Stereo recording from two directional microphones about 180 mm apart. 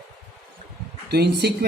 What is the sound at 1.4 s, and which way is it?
Speech, 60° right (ahead or behind).